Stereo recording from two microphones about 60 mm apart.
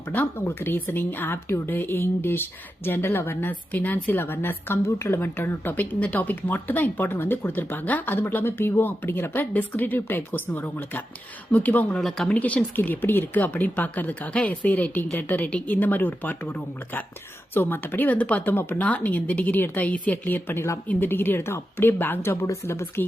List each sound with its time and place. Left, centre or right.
0.1 s speech: left
11.9 s speech: centre
12.3 s speech: left
18.5 s speech: left
21.1 s speech: left